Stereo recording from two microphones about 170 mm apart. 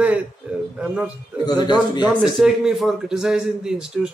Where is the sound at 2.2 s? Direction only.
5° right (ahead or behind).